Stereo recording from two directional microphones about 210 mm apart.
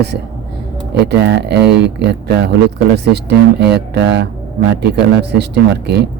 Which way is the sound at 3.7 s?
55° right (ahead or behind).